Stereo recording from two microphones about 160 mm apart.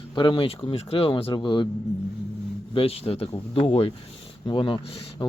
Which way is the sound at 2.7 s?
35° left (ahead or behind).